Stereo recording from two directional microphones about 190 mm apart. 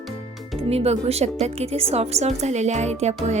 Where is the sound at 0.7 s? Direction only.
30° right (ahead or behind).